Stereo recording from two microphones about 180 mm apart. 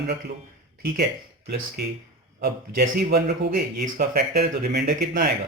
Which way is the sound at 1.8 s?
65° right (ahead or behind).